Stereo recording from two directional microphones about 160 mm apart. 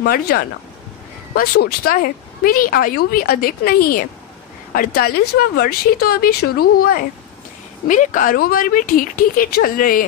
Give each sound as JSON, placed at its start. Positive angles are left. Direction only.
{"t": 0.0, "sound": "a woman's voice", "side_deg": 70}
{"t": 7.9, "sound": "a woman's voice", "side_deg": 55}